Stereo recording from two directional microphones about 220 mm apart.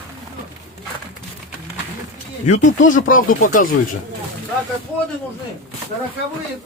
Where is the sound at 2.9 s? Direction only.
35° left (ahead or behind).